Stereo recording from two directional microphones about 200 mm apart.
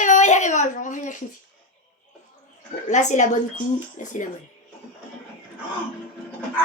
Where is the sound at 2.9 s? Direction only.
35° left (ahead or behind).